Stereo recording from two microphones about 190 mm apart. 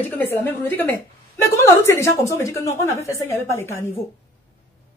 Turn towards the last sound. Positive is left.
turn(degrees=15)  # may be behind; listen again after turning